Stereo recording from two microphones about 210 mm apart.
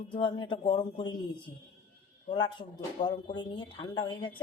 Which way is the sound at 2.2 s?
20° left (ahead or behind).